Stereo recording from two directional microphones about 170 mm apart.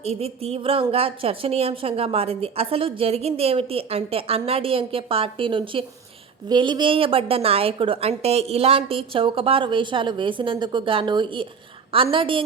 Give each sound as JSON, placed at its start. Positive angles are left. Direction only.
{"t": 0.0, "sound": "a woman's voice", "side_deg": -35}